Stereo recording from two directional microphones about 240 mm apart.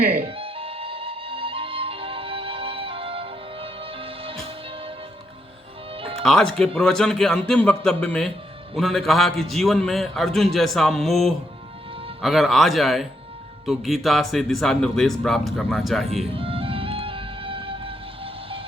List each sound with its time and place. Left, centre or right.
0.2 s music: right
6.2 s a man's voice: centre
16.2 s music: right